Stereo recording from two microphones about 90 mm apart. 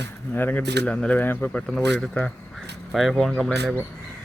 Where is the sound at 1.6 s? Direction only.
5° left (ahead or behind).